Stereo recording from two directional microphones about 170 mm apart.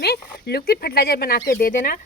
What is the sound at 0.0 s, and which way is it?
Speech, 70° left (ahead or behind).